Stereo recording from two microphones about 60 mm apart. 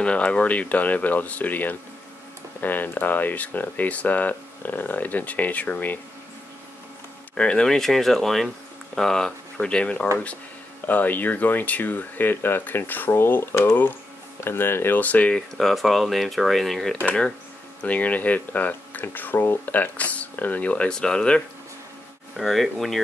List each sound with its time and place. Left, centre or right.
0.0 s speech: centre
7.3 s speech: centre
10.9 s speech: left
15.0 s speech: left
15.3 s speech: centre
17.8 s speech: left
22.4 s speech: centre